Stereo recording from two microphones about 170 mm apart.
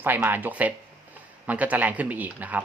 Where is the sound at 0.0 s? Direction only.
10° right (ahead or behind).